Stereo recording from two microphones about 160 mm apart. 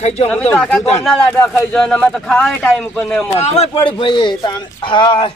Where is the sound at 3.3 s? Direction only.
40° left (ahead or behind).